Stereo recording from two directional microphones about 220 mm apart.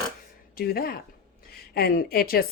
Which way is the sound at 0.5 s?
45° left (ahead or behind).